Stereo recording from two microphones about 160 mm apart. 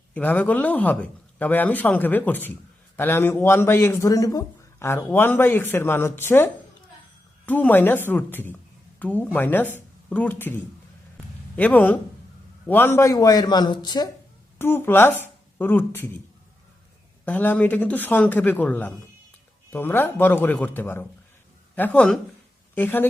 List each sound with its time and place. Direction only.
0.1 s a man's voice: 10° left (ahead or behind); by 14.1 s 25° left (ahead or behind)
14.6 s a woman's voice: 15° left (ahead or behind)
17.2 s speech: 10° left (ahead or behind)